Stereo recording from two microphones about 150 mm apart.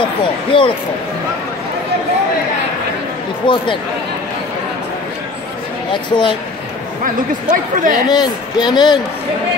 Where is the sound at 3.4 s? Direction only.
35° left (ahead or behind).